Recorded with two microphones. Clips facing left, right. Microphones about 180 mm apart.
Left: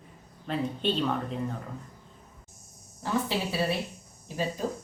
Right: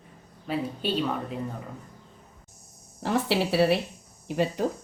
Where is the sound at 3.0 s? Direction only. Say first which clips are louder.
Right 4 dB; 75° right (ahead or behind).